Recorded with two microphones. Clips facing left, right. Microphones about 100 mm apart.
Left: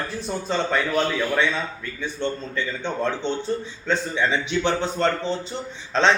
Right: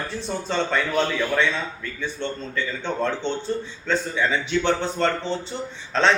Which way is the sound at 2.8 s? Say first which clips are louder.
Even; 15° left (ahead or behind).